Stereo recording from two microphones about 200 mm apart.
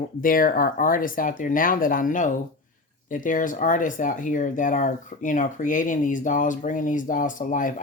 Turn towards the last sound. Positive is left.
turn(degrees=40)  # may be behind; listen again after turning